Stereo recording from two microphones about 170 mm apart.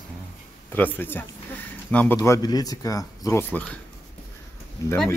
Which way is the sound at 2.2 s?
20° left (ahead or behind).